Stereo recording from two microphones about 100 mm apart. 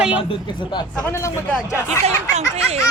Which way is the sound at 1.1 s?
30° left (ahead or behind).